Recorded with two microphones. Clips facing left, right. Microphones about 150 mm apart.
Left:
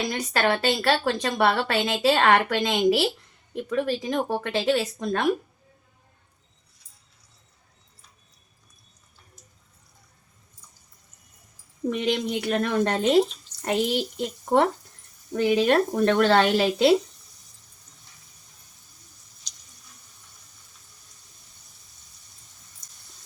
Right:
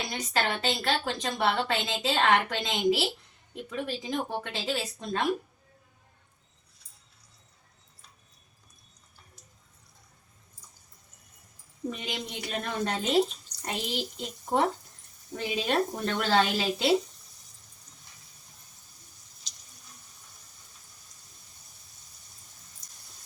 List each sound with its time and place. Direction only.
0.1 s a woman's voice: 75° left (ahead or behind)
11.9 s a woman's voice: 70° left (ahead or behind)